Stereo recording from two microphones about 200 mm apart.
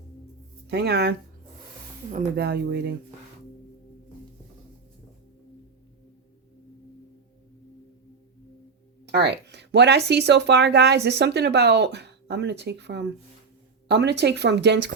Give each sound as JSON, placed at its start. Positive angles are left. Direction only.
{"t": 0.7, "sound": "speech", "side_deg": -55}
{"t": 2.1, "sound": "speech", "side_deg": -55}
{"t": 9.1, "sound": "speech", "side_deg": -55}